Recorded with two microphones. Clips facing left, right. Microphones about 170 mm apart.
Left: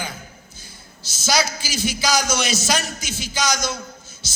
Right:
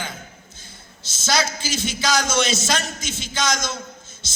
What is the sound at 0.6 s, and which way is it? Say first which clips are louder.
A man's voice: left 1 dB; 25° right (ahead or behind).